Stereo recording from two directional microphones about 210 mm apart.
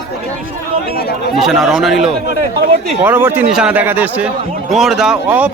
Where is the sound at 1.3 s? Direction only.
Centre (ahead or behind).